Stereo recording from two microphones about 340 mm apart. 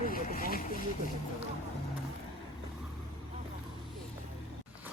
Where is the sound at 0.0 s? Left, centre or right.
Left.